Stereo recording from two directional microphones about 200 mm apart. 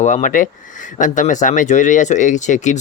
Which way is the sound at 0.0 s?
40° left (ahead or behind).